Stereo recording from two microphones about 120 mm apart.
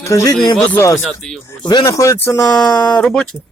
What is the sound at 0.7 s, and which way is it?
Speech, 25° left (ahead or behind).